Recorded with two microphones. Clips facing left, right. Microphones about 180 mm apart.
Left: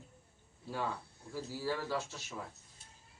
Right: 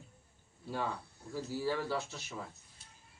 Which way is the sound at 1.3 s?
15° right (ahead or behind).